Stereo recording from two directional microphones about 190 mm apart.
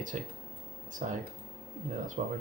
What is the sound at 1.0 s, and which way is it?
Speech, 40° right (ahead or behind).